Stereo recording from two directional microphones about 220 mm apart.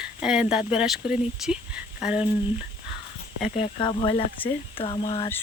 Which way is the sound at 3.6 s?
25° left (ahead or behind).